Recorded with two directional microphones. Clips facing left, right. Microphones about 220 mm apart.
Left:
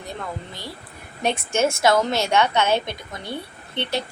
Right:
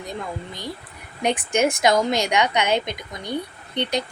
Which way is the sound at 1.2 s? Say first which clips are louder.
Right 1 dB; 15° right (ahead or behind).